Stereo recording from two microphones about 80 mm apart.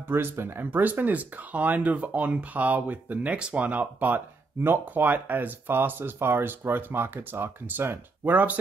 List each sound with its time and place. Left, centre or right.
0.1 s speech: right